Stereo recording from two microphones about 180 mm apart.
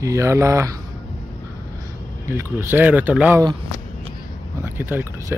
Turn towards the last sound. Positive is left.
turn(degrees=-10)  # may be behind; listen again after turning